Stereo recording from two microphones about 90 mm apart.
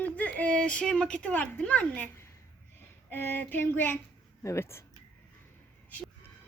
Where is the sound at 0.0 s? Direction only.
15° left (ahead or behind).